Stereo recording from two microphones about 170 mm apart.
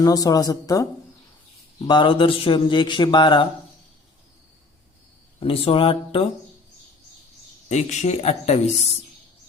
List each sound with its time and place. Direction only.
0.0 s speech: 20° left (ahead or behind)
1.9 s speech: 30° left (ahead or behind)
5.4 s speech: 35° left (ahead or behind)
7.7 s speech: 45° left (ahead or behind)